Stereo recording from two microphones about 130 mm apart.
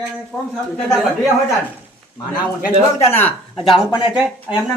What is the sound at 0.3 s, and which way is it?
Speech, centre (ahead or behind).